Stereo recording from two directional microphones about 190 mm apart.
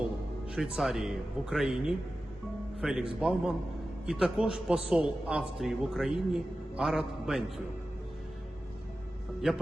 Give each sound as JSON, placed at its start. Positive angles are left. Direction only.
{"t": 0.8, "sound": "a man's voice", "side_deg": 0}